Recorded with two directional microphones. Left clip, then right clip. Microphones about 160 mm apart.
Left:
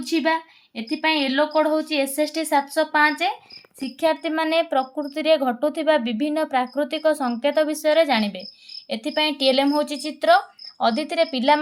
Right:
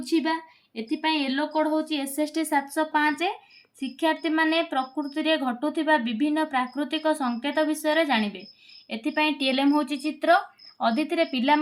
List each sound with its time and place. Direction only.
0.0 s speech: 30° left (ahead or behind)